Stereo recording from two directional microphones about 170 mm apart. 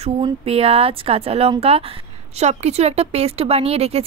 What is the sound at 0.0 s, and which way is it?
Speech, 35° right (ahead or behind).